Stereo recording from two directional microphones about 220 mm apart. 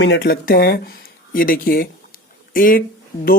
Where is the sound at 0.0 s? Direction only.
45° left (ahead or behind).